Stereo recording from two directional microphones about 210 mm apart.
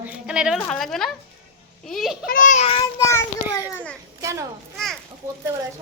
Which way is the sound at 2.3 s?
40° left (ahead or behind).